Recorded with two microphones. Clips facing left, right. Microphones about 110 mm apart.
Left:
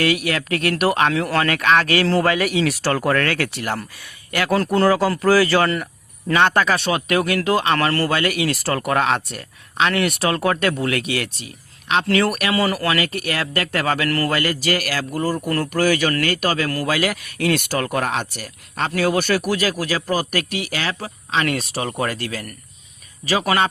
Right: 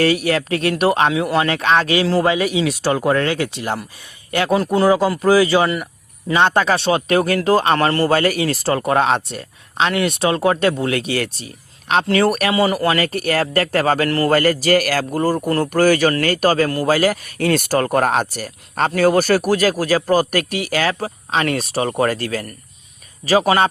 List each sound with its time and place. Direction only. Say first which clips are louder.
0.0 s speech: right 4 dB; 35° right (ahead or behind)
1.2 s speech: right 3 dB; 10° right (ahead or behind)
1.5 s speech: right 1 dB; 25° right (ahead or behind)
4.5 s speech: right 1 dB; 10° right (ahead or behind)
6.3 s speech: right 2 dB; 20° right (ahead or behind)
8.1 s speech: right 4 dB; 35° right (ahead or behind)
12.5 s speech: right 3 dB; 20° right (ahead or behind)
13.0 s speech: right 5 dB; 35° right (ahead or behind)
14.3 s a man's voice: right 6 dB; 40° right (ahead or behind)
15.4 s speech: right 4 dB; 25° right (ahead or behind)
15.7 s a man's voice: right 4 dB; 40° right (ahead or behind)